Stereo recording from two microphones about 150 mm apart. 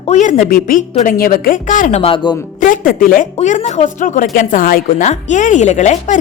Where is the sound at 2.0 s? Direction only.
35° left (ahead or behind).